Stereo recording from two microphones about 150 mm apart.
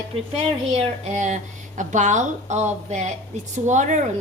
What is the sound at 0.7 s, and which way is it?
Speech, 45° right (ahead or behind).